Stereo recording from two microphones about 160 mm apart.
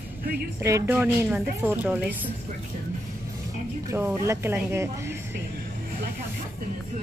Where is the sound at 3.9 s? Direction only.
15° right (ahead or behind).